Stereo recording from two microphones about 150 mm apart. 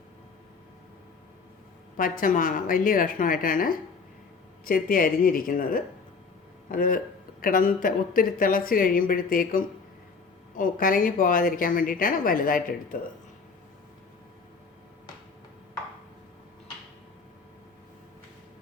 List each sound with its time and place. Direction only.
2.0 s a woman's voice: 65° left (ahead or behind)